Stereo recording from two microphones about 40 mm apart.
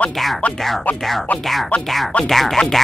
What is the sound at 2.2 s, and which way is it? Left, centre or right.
Speech, centre.